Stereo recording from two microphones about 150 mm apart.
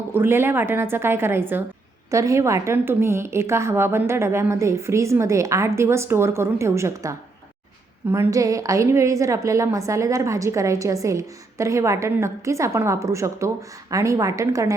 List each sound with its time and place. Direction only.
0.1 s a woman's voice: 15° right (ahead or behind)